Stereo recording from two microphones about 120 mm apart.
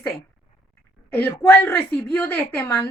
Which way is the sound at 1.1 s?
15° left (ahead or behind).